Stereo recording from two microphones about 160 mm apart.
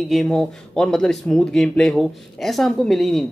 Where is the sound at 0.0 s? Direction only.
Centre (ahead or behind).